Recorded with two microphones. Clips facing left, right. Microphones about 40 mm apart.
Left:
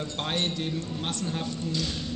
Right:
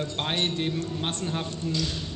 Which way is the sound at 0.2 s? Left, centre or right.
Right.